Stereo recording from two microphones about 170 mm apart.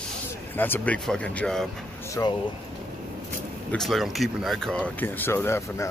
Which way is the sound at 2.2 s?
15° left (ahead or behind).